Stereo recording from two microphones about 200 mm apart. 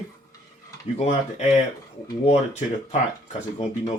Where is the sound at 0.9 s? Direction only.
30° left (ahead or behind).